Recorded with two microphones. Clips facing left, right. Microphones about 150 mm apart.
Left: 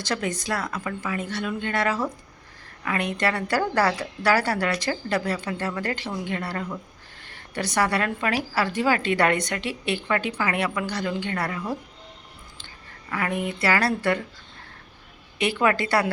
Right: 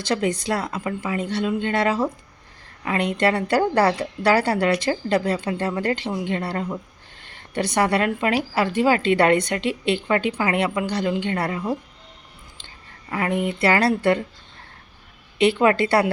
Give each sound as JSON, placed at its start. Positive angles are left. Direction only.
{"t": 0.1, "sound": "a woman's voice", "side_deg": -25}
{"t": 13.1, "sound": "a woman's voice", "side_deg": -25}
{"t": 15.4, "sound": "a woman's voice", "side_deg": -25}